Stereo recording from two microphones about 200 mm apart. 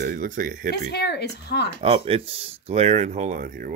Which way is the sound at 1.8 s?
30° right (ahead or behind).